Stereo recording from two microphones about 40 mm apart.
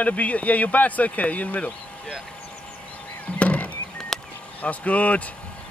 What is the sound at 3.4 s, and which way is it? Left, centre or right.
Music, left.